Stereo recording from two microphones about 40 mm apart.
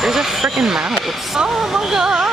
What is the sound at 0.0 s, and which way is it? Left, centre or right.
Vehicle, centre.